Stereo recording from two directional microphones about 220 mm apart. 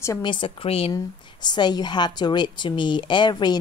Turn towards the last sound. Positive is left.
turn(degrees=20)  # may be behind; listen again after turning